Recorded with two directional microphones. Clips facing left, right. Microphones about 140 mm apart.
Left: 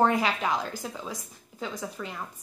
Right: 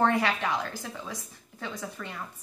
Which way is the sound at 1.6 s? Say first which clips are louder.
Left 2 dB; 10° left (ahead or behind).